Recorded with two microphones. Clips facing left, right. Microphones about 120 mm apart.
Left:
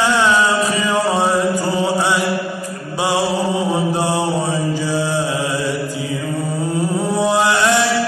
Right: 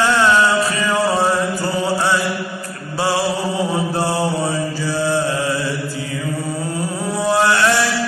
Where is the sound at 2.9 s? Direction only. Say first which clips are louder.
Even; 15° left (ahead or behind).